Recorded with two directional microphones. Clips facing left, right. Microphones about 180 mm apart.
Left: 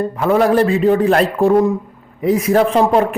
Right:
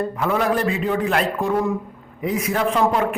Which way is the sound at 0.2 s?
45° left (ahead or behind).